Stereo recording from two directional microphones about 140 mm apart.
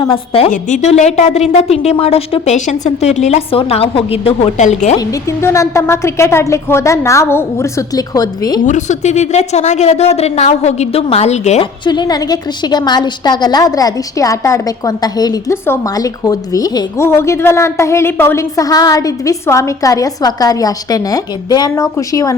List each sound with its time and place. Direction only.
0.1 s a woman's voice: 40° left (ahead or behind)
0.5 s a woman's voice: 55° left (ahead or behind)
4.9 s a woman's voice: 20° left (ahead or behind)
8.6 s a woman's voice: 60° left (ahead or behind)
11.6 s a woman's voice: 30° left (ahead or behind)